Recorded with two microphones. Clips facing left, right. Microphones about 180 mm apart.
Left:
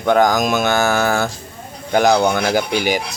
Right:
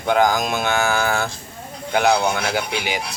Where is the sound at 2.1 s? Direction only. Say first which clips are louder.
Left 4 dB; 70° left (ahead or behind).